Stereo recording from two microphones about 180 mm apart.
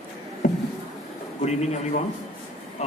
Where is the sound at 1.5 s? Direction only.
40° left (ahead or behind).